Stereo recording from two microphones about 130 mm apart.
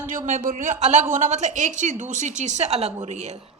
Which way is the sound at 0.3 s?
65° right (ahead or behind).